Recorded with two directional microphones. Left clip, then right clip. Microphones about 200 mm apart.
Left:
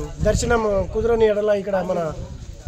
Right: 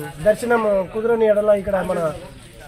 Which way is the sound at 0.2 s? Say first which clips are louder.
Right 3 dB; 30° left (ahead or behind).